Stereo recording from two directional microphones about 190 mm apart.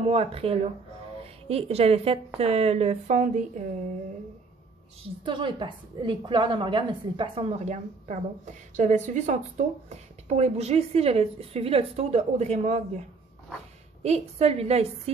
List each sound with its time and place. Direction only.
0.1 s a woman's voice: 30° right (ahead or behind)
5.2 s a woman's voice: 25° right (ahead or behind)
14.0 s a woman's voice: 35° right (ahead or behind)